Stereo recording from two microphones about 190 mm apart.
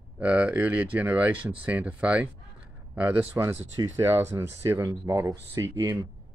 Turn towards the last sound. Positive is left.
turn(degrees=-20)  # may be behind; listen again after turning